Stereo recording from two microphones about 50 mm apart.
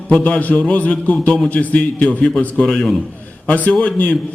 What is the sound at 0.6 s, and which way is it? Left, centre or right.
Speech, left.